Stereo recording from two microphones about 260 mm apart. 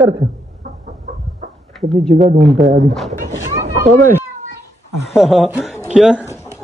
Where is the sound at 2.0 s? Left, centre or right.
Right.